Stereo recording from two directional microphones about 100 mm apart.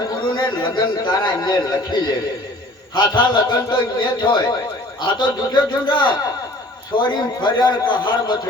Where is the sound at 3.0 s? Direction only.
50° left (ahead or behind).